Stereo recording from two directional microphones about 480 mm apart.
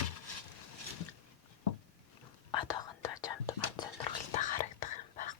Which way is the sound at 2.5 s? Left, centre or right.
Centre.